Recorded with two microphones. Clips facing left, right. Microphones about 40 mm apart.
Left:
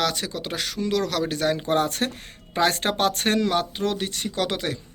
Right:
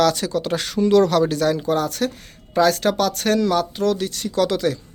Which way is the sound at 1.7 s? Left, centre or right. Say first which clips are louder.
Right 2 dB; left.